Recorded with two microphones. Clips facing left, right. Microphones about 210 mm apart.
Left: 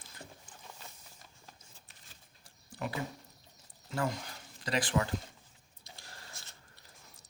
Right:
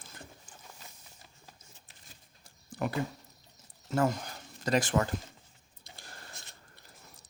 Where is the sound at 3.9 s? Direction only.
45° right (ahead or behind).